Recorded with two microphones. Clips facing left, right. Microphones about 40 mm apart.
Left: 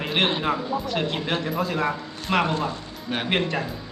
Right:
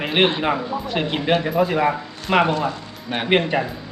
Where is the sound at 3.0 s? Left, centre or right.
Centre.